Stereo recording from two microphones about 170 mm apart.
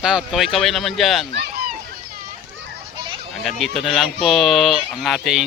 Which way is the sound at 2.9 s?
30° right (ahead or behind).